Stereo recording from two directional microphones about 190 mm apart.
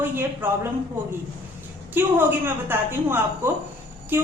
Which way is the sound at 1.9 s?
10° right (ahead or behind).